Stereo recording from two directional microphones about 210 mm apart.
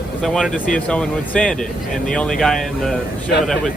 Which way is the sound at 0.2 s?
Centre (ahead or behind).